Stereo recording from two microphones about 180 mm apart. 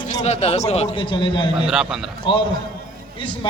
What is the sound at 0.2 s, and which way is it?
A man's voice, 35° left (ahead or behind).